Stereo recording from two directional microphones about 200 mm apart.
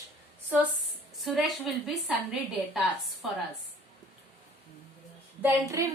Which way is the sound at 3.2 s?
Centre (ahead or behind).